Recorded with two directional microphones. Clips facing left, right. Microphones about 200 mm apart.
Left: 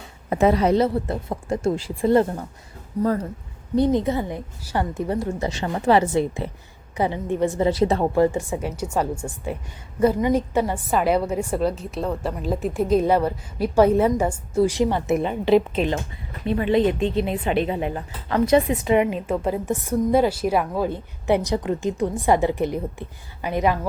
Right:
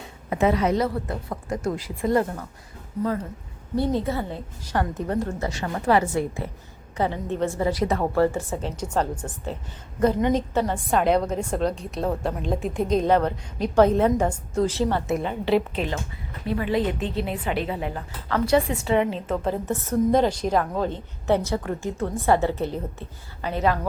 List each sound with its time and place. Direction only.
0.3 s a woman's voice: 35° left (ahead or behind)
3.8 s a woman's voice: 20° left (ahead or behind)
5.5 s a woman's voice: 25° left (ahead or behind)
8.1 s a woman's voice: 15° left (ahead or behind)